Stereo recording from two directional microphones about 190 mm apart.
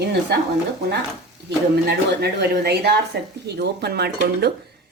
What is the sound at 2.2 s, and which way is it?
Speech, 60° right (ahead or behind).